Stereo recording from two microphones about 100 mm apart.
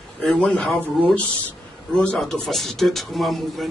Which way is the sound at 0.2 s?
5° left (ahead or behind).